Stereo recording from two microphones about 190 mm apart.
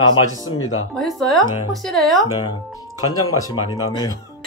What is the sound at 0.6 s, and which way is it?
Speech, 90° left.